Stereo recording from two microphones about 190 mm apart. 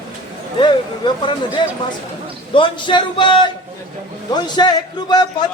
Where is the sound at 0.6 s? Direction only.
25° left (ahead or behind).